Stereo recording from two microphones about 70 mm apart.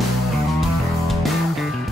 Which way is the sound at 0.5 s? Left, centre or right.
Centre.